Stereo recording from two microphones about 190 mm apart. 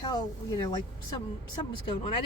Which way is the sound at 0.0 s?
20° left (ahead or behind).